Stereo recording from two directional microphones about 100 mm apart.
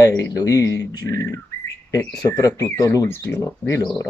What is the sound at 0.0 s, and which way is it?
Speech, 35° left (ahead or behind).